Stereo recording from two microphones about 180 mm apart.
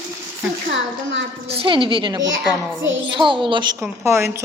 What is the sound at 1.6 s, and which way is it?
Speech, 30° right (ahead or behind).